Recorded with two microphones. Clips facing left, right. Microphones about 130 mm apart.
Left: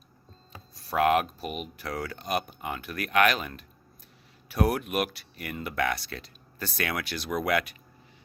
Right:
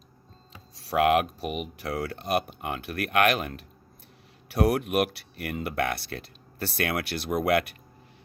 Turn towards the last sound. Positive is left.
turn(degrees=-55)  # may be behind; listen again after turning